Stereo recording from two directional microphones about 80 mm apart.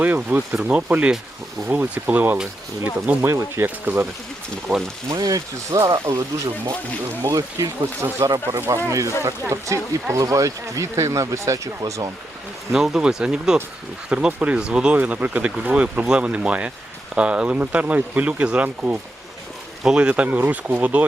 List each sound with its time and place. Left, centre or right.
0.0 s speech: right
3.2 s speech: right
3.8 s speech: right
4.7 s speech: centre
5.2 s speech: right
12.7 s speech: centre; by 21.0 s right